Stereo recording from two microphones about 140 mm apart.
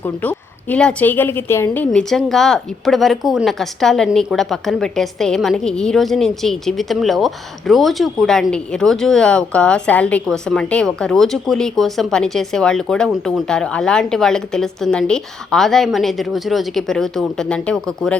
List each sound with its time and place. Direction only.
0.0 s a woman's voice: 10° left (ahead or behind)